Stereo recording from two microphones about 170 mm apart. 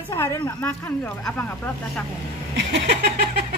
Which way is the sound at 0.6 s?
10° left (ahead or behind).